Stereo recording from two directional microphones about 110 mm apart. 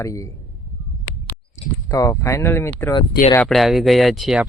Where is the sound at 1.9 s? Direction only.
30° left (ahead or behind).